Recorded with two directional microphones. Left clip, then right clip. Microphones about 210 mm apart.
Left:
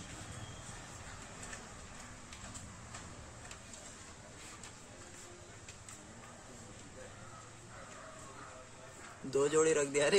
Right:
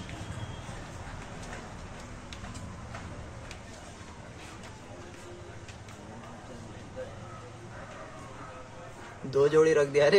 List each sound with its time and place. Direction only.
9.3 s a man's voice: 25° left (ahead or behind)